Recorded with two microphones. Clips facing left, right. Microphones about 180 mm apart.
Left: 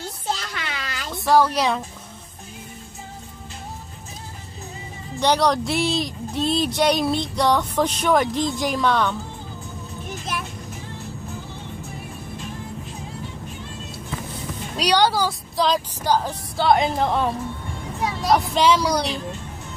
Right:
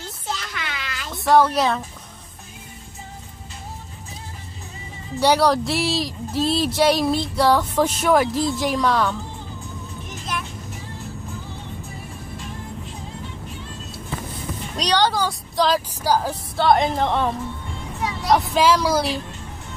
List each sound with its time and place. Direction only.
0.3 s a sound: 35° left (ahead or behind)
1.1 s speech: centre (ahead or behind)
5.2 s speech: 5° right (ahead or behind)
14.8 s speech: 10° left (ahead or behind)
18.3 s speech: centre (ahead or behind)